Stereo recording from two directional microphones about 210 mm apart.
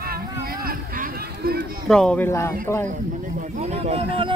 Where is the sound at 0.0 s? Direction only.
45° right (ahead or behind).